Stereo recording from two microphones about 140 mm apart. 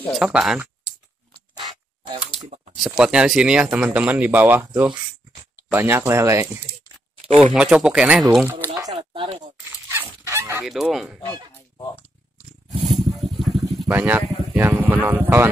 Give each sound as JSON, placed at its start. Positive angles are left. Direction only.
{"t": 0.1, "sound": "goose", "side_deg": -5}
{"t": 2.3, "sound": "a sound", "side_deg": -45}
{"t": 2.8, "sound": "speech", "side_deg": -5}
{"t": 7.2, "sound": "speech", "side_deg": -45}
{"t": 7.5, "sound": "speech", "side_deg": -5}
{"t": 8.9, "sound": "speech", "side_deg": -40}
{"t": 9.7, "sound": "dog", "side_deg": -15}
{"t": 10.2, "sound": "fowl", "side_deg": -20}
{"t": 10.6, "sound": "goose", "side_deg": 0}
{"t": 12.8, "sound": "vehicle", "side_deg": 0}
{"t": 13.8, "sound": "speech", "side_deg": -15}